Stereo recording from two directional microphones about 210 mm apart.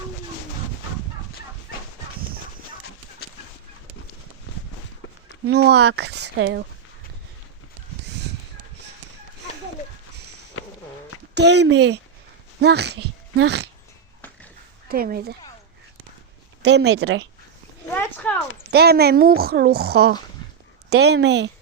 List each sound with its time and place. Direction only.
5.5 s speech: 50° right (ahead or behind)
11.3 s speech: 55° right (ahead or behind)
14.8 s speech: 45° right (ahead or behind)
16.6 s speech: 55° right (ahead or behind)
17.9 s a sound: 10° left (ahead or behind)
18.7 s speech: 50° right (ahead or behind)
20.4 s a sound: 20° left (ahead or behind)
20.9 s speech: 50° right (ahead or behind)